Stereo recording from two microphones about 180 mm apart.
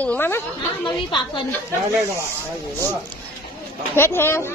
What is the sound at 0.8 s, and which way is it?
Speech, 25° left (ahead or behind).